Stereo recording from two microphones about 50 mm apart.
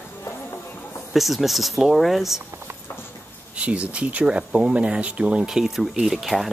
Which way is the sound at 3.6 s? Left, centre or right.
Right.